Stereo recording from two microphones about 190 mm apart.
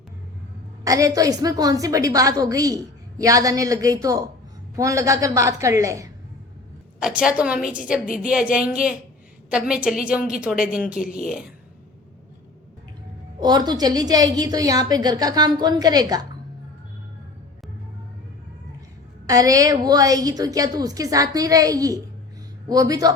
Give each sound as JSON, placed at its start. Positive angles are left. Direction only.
{"t": 0.9, "sound": "a woman's voice", "side_deg": -15}
{"t": 7.0, "sound": "a woman's voice", "side_deg": -5}
{"t": 13.4, "sound": "a woman's voice", "side_deg": -20}
{"t": 19.3, "sound": "a woman's voice", "side_deg": -20}